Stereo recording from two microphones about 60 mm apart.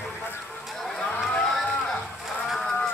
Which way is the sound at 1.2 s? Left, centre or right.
Centre.